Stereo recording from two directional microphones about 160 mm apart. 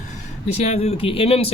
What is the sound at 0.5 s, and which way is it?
Speech, 40° left (ahead or behind).